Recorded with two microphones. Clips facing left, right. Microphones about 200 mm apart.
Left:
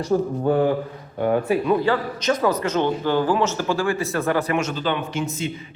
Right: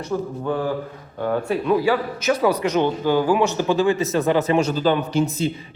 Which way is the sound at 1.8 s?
10° right (ahead or behind).